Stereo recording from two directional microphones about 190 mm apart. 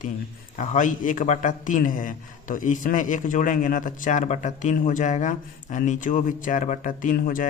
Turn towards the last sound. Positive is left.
turn(degrees=45)  # may be behind; listen again after turning